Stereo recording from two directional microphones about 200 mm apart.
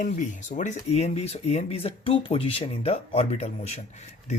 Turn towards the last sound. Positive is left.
turn(degrees=35)  # may be behind; listen again after turning